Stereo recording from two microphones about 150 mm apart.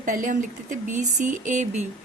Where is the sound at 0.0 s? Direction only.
60° right (ahead or behind).